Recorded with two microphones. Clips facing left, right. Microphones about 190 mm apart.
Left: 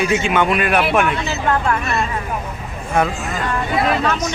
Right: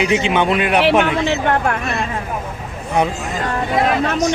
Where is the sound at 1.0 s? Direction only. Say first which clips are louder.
Right 3 dB; 85° right.